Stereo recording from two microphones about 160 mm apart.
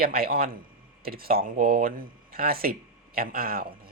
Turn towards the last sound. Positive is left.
turn(degrees=-65)  # may be behind; listen again after turning